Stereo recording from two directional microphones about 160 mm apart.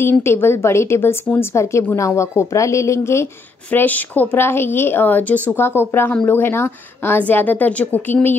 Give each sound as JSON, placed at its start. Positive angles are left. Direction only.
{"t": 0.0, "sound": "a woman's voice", "side_deg": 15}